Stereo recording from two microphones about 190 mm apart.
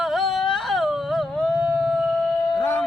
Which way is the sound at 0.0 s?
Centre (ahead or behind).